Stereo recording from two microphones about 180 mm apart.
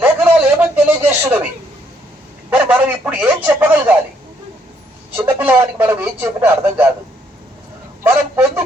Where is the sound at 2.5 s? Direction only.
10° right (ahead or behind).